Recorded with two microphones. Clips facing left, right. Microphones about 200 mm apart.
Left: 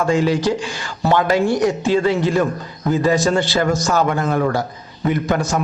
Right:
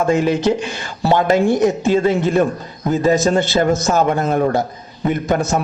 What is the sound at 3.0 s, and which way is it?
Speech, 20° right (ahead or behind).